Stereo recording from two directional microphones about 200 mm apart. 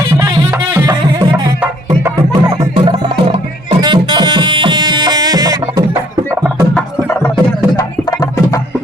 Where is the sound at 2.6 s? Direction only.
25° right (ahead or behind).